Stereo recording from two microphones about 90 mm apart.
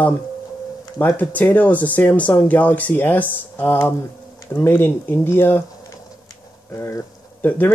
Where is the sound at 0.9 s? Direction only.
20° left (ahead or behind).